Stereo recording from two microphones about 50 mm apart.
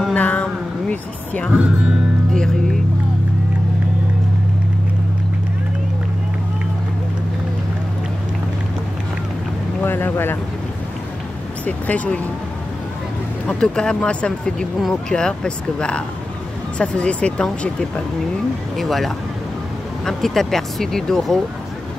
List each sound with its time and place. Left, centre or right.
0.1 s a sound: left
1.5 s speech: centre
2.3 s speech: centre
9.8 s vehicle: left
11.6 s speech: left
13.5 s speech: centre
18.8 s speech: centre